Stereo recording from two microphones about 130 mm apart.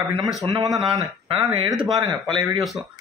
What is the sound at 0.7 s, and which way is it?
Speech, centre (ahead or behind).